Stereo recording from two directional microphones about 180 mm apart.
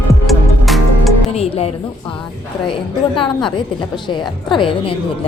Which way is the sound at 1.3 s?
35° left (ahead or behind).